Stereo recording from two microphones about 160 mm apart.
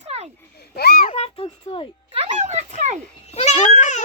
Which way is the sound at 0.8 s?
80° left.